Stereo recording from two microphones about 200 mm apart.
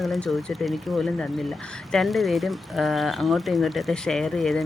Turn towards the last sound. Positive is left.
turn(degrees=0)  # may be behind; listen again after turning